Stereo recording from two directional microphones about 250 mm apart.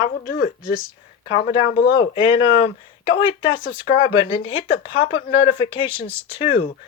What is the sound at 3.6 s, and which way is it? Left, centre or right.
Speech, left.